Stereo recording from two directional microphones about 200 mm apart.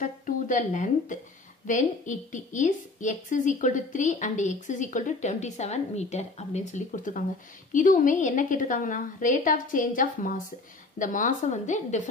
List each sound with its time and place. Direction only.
0.0 s a woman's voice: 40° left (ahead or behind)